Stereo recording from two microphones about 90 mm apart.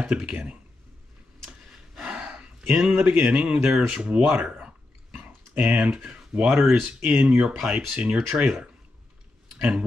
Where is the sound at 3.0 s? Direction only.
10° right (ahead or behind).